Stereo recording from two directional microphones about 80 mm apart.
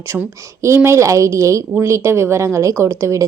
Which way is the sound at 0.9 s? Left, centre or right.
Right.